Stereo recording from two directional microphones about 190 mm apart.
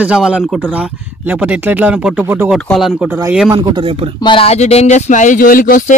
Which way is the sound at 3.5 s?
20° right (ahead or behind).